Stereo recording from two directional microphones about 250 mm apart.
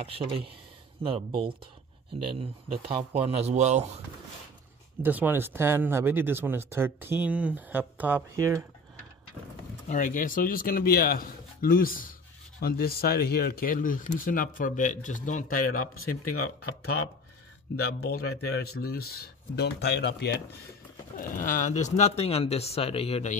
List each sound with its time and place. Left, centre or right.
0.0 s speech: right
5.0 s speech: centre
9.8 s speech: left
16.3 s speech: left
18.0 s speech: left